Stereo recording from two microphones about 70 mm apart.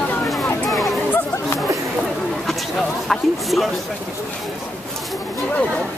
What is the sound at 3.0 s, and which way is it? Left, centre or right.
Speech, centre.